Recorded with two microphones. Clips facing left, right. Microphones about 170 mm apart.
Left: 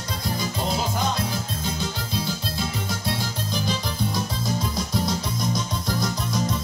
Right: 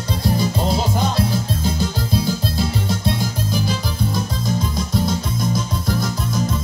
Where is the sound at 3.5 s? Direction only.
5° right (ahead or behind).